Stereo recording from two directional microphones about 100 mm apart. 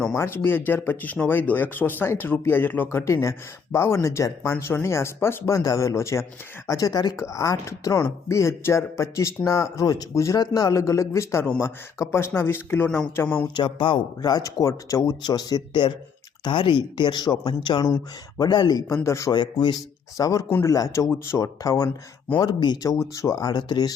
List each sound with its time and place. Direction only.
0.2 s speech: 25° left (ahead or behind); by 7.2 s 45° left (ahead or behind)
7.2 s speech: 30° left (ahead or behind); by 13.5 s 15° left (ahead or behind)
13.5 s speech: 55° left (ahead or behind)
14.2 s speech: 40° left (ahead or behind)
19.3 s speech: 50° left (ahead or behind); by 21.8 s 35° left (ahead or behind)
22.4 s speech: 45° left (ahead or behind)